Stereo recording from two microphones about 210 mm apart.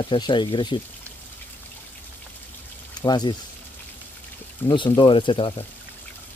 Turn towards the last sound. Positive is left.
turn(degrees=25)  # may be behind; listen again after turning